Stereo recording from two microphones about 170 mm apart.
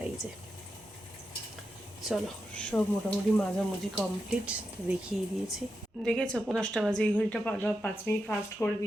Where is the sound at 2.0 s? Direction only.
Centre (ahead or behind).